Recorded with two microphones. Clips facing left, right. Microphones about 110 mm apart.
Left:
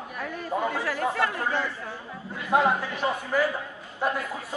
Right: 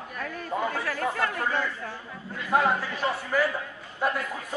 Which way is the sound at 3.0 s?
10° left (ahead or behind).